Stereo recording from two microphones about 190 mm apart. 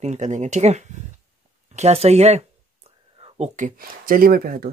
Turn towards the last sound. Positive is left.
turn(degrees=-50)  # may be behind; listen again after turning